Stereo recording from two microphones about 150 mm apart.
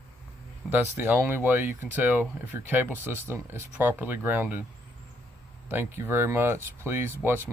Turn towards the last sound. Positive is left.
turn(degrees=-15)  # may be behind; listen again after turning